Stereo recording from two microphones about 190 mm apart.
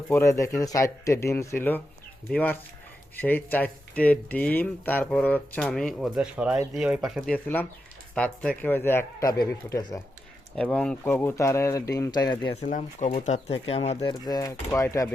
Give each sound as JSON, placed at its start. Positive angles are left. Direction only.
{"t": 0.1, "sound": "speech", "side_deg": 15}
{"t": 10.5, "sound": "speech", "side_deg": 5}
{"t": 12.6, "sound": "speech", "side_deg": 40}